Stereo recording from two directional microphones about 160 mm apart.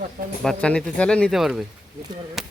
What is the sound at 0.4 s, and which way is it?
Speech, 5° left (ahead or behind).